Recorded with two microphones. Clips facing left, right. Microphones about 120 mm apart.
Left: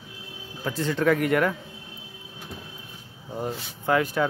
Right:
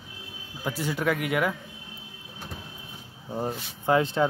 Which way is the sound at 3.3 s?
25° right (ahead or behind).